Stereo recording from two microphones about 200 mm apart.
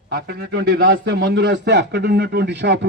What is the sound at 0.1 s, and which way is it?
A man's voice, 55° right (ahead or behind).